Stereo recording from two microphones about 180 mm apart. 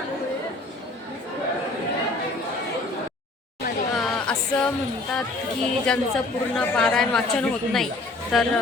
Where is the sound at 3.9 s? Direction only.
5° left (ahead or behind).